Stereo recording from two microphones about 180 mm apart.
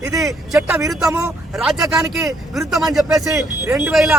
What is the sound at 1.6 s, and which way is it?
A man's voice, centre (ahead or behind).